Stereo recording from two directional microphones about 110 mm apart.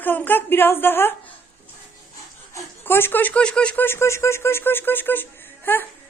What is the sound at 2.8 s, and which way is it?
A woman's voice, 20° left (ahead or behind).